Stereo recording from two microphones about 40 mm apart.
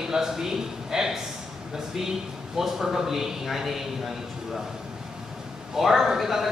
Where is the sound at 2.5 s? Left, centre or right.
Centre.